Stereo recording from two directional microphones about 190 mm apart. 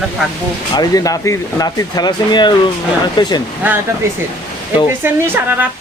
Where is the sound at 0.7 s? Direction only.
20° left (ahead or behind).